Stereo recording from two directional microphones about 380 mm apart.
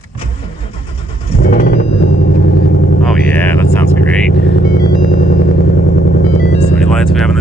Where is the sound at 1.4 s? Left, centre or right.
Left.